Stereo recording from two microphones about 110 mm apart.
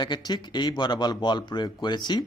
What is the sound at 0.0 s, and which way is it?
Speech, 40° left (ahead or behind).